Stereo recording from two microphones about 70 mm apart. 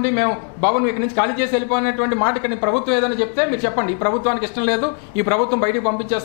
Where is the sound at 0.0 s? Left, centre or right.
Centre.